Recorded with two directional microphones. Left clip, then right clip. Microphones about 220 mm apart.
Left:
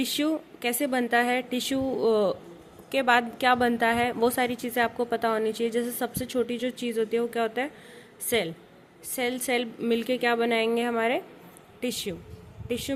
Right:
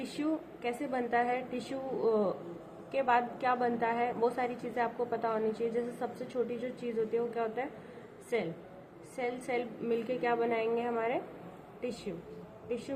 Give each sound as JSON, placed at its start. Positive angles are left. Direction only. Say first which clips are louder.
{"t": 0.0, "sound": "a woman's voice", "louder": "left 8 dB", "side_deg": 55}
{"t": 9.1, "sound": "a woman's voice", "louder": "left 7 dB", "side_deg": 55}